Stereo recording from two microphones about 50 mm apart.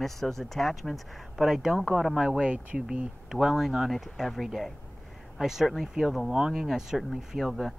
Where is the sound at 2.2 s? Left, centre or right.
Centre.